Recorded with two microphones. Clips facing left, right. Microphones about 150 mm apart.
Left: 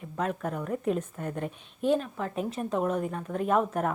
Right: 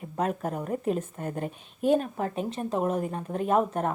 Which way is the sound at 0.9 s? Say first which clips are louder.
Right 1 dB; centre (ahead or behind).